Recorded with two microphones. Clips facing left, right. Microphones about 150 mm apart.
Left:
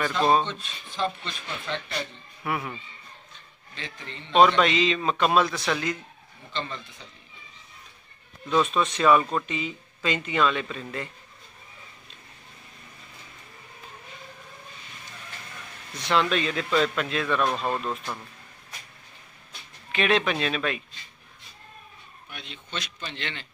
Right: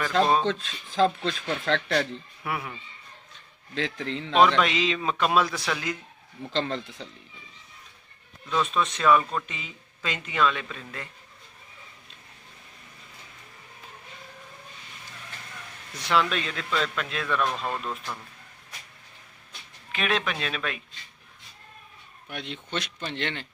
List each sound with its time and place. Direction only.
0.5 s speech: 90° right
2.4 s speech: centre (ahead or behind)
3.7 s speech: 90° right
4.4 s speech: centre (ahead or behind)
6.5 s speech: 90° right
8.5 s speech: 15° left (ahead or behind)
16.0 s speech: 5° right (ahead or behind)
17.8 s speech: 20° left (ahead or behind)
19.9 s speech: centre (ahead or behind)
22.3 s speech: 65° right (ahead or behind)